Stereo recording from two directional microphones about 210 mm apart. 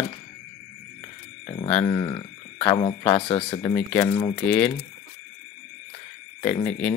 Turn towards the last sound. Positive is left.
turn(degrees=5)  # may be behind; listen again after turning